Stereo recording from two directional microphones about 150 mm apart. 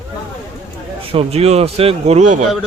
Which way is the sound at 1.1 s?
40° right (ahead or behind).